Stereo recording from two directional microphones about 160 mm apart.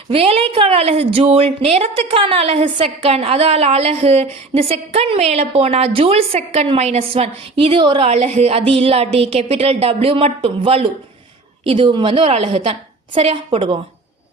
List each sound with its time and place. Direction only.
0.1 s a woman's voice: 35° right (ahead or behind)